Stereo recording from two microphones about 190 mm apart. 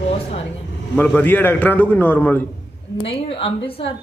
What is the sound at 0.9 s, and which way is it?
Speech, 5° left (ahead or behind).